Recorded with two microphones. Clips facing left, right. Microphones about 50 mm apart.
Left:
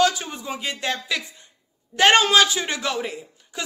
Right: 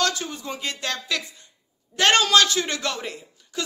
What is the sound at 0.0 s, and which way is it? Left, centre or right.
A man's voice, centre.